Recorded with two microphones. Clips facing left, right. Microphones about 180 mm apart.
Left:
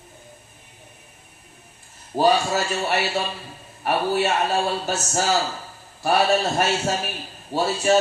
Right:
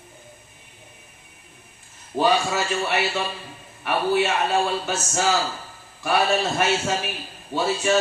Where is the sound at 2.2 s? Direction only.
40° left (ahead or behind).